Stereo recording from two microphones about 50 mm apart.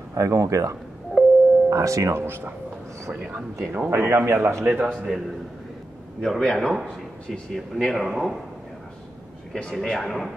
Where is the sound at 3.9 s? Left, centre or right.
Right.